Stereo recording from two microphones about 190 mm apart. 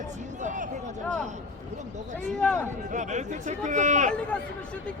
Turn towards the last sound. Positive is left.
turn(degrees=5)  # may be behind; listen again after turning